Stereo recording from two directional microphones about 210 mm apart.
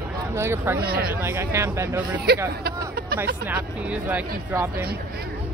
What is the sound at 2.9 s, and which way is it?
Hubbub, 45° right (ahead or behind).